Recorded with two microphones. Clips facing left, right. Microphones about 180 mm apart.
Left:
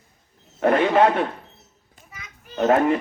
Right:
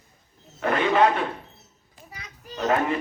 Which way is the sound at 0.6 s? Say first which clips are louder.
Left 5 dB; 50° left (ahead or behind).